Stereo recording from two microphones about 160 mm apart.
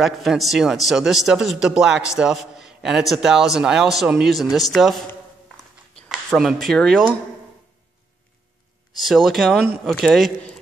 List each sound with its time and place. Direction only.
0.0 s a man's voice: centre (ahead or behind)
6.0 s speech: centre (ahead or behind)
9.0 s a man's voice: centre (ahead or behind)